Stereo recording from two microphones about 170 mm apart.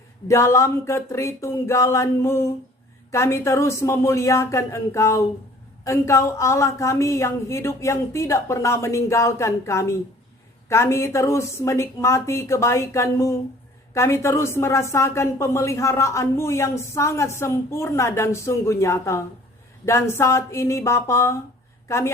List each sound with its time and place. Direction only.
0.3 s a woman's voice: 15° left (ahead or behind)